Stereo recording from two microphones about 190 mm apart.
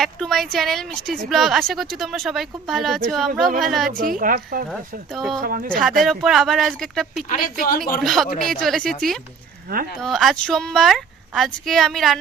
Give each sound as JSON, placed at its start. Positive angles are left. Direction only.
{"t": 0.0, "sound": "a woman's voice", "side_deg": 0}
{"t": 3.9, "sound": "a woman's voice", "side_deg": -45}
{"t": 4.7, "sound": "a woman's voice", "side_deg": 0}
{"t": 5.4, "sound": "a woman's voice", "side_deg": -50}
{"t": 6.0, "sound": "a woman's voice", "side_deg": 0}
{"t": 7.3, "sound": "a woman's voice", "side_deg": 50}
{"t": 7.9, "sound": "a woman's voice", "side_deg": 0}